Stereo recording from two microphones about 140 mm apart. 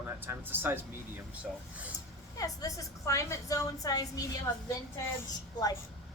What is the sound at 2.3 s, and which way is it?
A woman's voice, 25° left (ahead or behind).